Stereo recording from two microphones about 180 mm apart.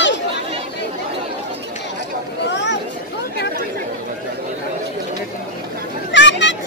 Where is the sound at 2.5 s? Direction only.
75° left (ahead or behind).